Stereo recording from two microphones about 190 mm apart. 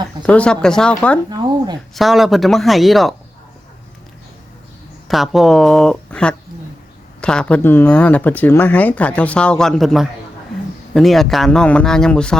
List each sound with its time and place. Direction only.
0.3 s a man's voice: 5° left (ahead or behind)
1.3 s speech: 20° right (ahead or behind)
2.0 s a man's voice: centre (ahead or behind)
5.0 s a man's voice: centre (ahead or behind)